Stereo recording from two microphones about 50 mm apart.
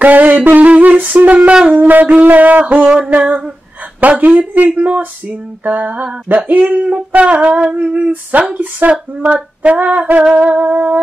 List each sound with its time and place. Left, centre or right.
0.0 s music: right
1.7 s female singing: right
2.7 s speech: right
4.2 s female singing: right
6.2 s speech: right
8.1 s female singing: right
10.3 s speech: right